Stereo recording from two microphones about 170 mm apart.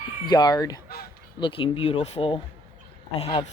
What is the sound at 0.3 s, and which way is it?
Speech, 25° left (ahead or behind).